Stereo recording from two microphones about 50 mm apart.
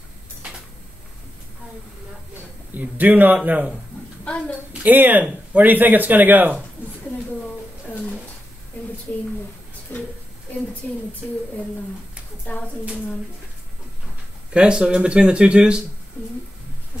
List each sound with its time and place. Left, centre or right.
2.7 s speech: right
4.2 s a child's voice: left
4.8 s speech: right
9.1 s speech: left
12.5 s speech: left
14.5 s speech: centre